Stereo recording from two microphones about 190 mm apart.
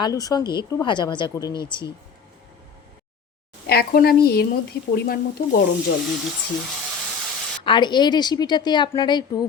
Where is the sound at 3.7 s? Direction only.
55° left (ahead or behind).